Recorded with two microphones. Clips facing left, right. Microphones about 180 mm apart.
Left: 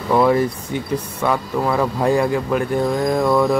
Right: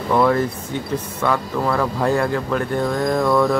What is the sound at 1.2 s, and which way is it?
Speech, 10° left (ahead or behind).